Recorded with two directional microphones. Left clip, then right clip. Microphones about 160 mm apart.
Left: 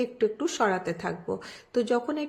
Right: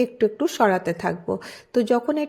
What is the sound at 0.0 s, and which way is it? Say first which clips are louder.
A woman's voice: right 6 dB; 35° right (ahead or behind).